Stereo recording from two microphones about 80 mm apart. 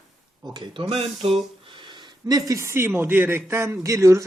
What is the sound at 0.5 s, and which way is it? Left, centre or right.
Speech, right.